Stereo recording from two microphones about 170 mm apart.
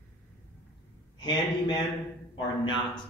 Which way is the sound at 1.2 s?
25° left (ahead or behind).